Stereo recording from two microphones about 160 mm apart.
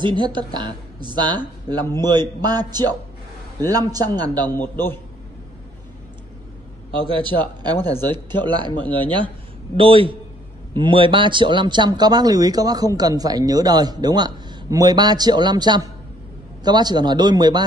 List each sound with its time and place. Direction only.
0.0 s speech: 30° right (ahead or behind)
4.6 s a man's voice: 15° left (ahead or behind)
7.1 s a man's voice: 30° right (ahead or behind)